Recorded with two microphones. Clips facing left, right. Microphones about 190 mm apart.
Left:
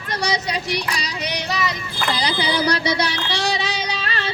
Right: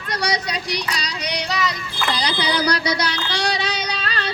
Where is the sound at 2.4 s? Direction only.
25° left (ahead or behind).